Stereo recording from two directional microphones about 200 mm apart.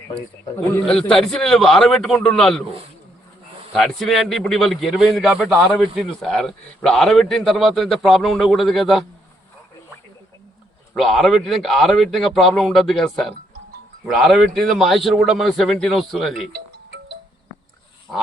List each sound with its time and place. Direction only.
0.5 s a man's voice: 5° left (ahead or behind)
3.7 s a man's voice: centre (ahead or behind)
10.9 s a man's voice: centre (ahead or behind)